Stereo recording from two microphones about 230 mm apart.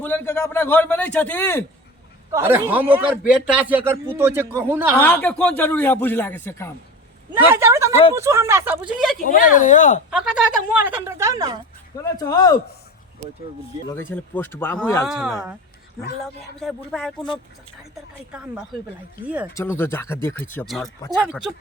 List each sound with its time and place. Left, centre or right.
0.0 s a man's voice: centre
2.3 s speech: centre
4.9 s a man's voice: centre
7.3 s speech: centre
9.2 s speech: left
10.1 s speech: centre
12.2 s a man's voice: centre
13.9 s a man's voice: centre
15.0 s speech: centre
18.3 s speech: centre
19.5 s a man's voice: centre